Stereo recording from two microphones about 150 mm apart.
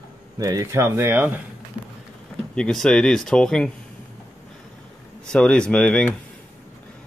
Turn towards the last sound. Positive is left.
turn(degrees=5)  # may be behind; listen again after turning